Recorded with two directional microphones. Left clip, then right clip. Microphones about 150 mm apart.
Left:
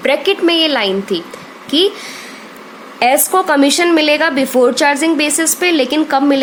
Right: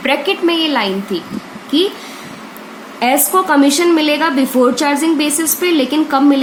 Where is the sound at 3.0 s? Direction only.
70° left (ahead or behind).